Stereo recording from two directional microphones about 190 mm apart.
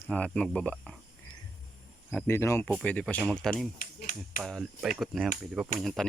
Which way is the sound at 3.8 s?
45° left (ahead or behind).